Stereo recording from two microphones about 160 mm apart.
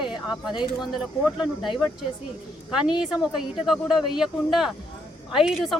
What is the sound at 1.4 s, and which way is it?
Speech, centre (ahead or behind).